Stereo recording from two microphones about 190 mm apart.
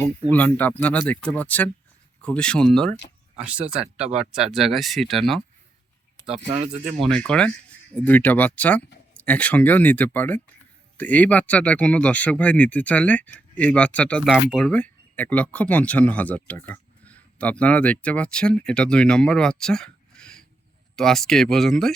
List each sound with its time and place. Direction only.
0.3 s speech: 10° left (ahead or behind)
6.2 s speech: 30° right (ahead or behind)
7.0 s speech: 5° left (ahead or behind)